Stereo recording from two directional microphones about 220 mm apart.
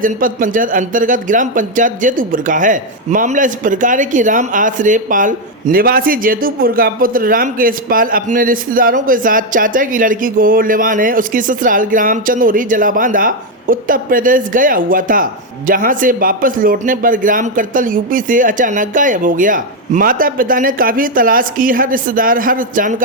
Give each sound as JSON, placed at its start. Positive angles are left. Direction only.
{"t": 0.0, "sound": "speech", "side_deg": -40}